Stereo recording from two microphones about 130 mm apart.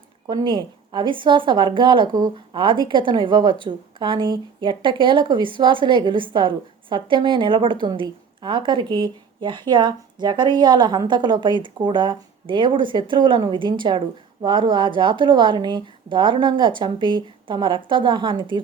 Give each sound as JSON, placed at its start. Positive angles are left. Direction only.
{"t": 0.3, "sound": "a woman's voice", "side_deg": -35}